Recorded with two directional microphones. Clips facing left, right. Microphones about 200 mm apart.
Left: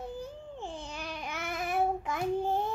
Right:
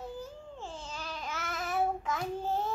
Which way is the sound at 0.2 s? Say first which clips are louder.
Left 2 dB; 15° left (ahead or behind).